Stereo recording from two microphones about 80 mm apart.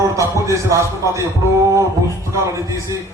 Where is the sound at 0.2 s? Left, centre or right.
Right.